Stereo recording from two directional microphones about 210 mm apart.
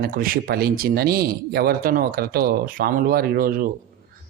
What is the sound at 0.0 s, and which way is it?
Speech, 45° right (ahead or behind).